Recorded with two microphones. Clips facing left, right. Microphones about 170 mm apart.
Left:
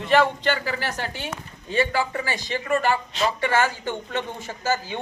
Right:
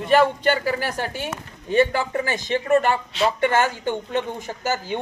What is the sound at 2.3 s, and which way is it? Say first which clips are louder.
A woman's voice: right 5 dB; 20° right (ahead or behind).